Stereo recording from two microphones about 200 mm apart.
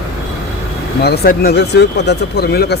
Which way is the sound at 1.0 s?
50° left (ahead or behind).